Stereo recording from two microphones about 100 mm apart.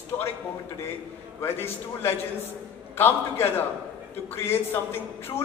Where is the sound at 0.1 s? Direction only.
25° left (ahead or behind).